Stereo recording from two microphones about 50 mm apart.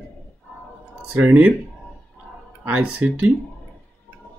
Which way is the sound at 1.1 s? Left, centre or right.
Right.